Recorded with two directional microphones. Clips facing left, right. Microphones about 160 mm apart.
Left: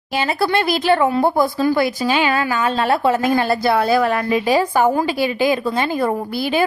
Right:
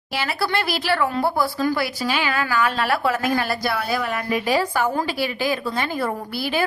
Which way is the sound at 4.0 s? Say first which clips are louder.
Left 8 dB; 90° left.